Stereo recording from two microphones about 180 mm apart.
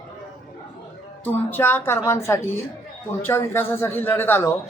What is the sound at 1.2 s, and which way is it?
Speech, 10° left (ahead or behind).